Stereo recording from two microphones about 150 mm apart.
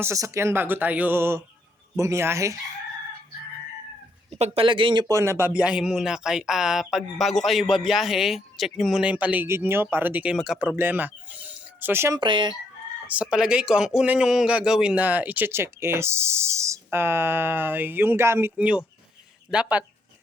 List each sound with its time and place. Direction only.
0.0 s speech: 20° right (ahead or behind)
4.4 s speech: 45° right (ahead or behind)
5.0 s speech: 20° right (ahead or behind)
12.2 s speech: 30° right (ahead or behind)
13.1 s speech: 5° right (ahead or behind)